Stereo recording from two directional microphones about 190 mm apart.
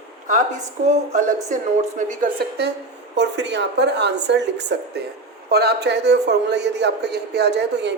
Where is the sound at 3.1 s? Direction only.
65° right (ahead or behind).